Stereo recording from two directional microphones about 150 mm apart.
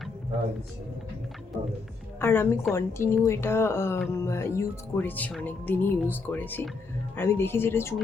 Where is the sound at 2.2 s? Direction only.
15° left (ahead or behind).